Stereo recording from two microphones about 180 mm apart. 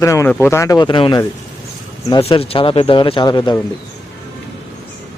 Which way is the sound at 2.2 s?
30° left (ahead or behind).